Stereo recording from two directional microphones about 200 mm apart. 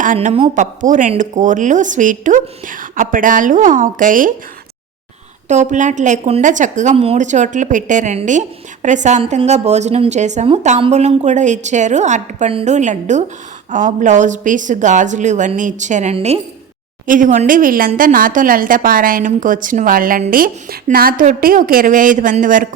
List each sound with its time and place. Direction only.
0.0 s a woman's voice: 40° right (ahead or behind)
5.5 s a woman's voice: 35° right (ahead or behind)